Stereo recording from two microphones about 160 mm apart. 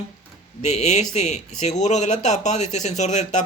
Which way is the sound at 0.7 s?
45° left (ahead or behind).